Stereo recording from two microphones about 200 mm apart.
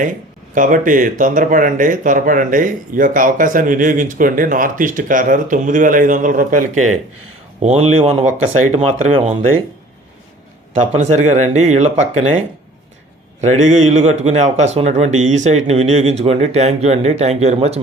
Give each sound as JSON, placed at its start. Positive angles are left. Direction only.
{"t": 0.5, "sound": "speech", "side_deg": -40}
{"t": 10.9, "sound": "speech", "side_deg": -35}
{"t": 13.4, "sound": "speech", "side_deg": -35}